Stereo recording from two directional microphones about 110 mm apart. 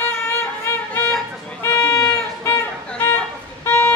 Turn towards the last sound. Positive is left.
turn(degrees=20)  # may be behind; listen again after turning